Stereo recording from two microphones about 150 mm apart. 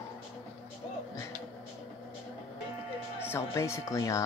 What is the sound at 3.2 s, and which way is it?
Speech, 15° left (ahead or behind).